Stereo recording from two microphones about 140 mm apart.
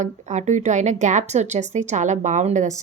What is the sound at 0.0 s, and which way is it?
A woman's voice, 60° right (ahead or behind).